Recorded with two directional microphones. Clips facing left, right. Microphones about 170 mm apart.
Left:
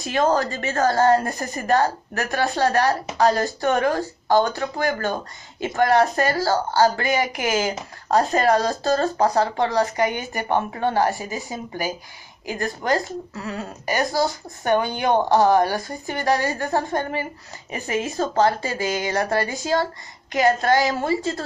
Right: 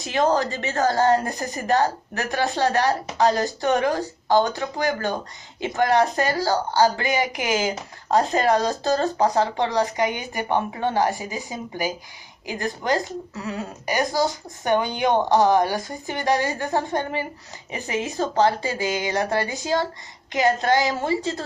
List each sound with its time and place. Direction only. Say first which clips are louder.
0.0 s speech: left 1 dB; 20° right (ahead or behind)